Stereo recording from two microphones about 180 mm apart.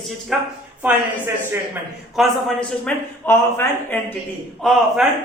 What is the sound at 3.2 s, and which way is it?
Speech, 15° left (ahead or behind).